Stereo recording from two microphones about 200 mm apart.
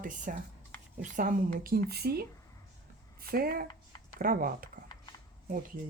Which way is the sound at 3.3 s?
50° right (ahead or behind).